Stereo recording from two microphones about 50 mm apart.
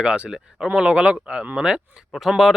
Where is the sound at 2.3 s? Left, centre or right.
Centre.